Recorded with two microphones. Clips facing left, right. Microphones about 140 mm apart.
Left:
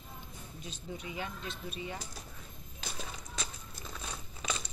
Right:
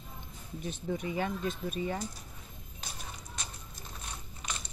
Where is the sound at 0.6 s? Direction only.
55° right (ahead or behind).